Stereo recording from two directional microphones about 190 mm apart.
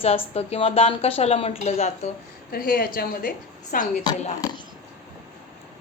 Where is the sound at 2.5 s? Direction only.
50° left (ahead or behind).